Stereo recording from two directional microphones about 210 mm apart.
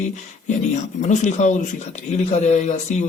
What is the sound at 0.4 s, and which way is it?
Speech, 35° left (ahead or behind).